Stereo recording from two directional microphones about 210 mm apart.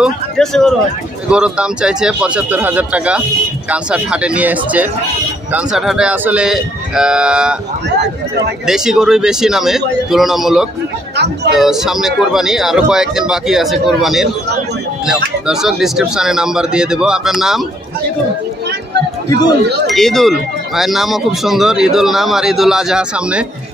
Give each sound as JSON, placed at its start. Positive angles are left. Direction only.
{"t": 0.0, "sound": "speech", "side_deg": 0}
{"t": 8.6, "sound": "speech", "side_deg": 0}
{"t": 19.2, "sound": "speech", "side_deg": 20}
{"t": 19.9, "sound": "speech", "side_deg": 0}